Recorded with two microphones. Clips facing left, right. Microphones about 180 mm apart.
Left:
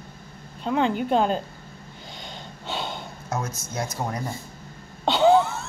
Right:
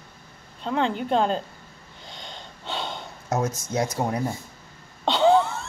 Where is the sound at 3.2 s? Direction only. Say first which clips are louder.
Right 5 dB; 20° right (ahead or behind).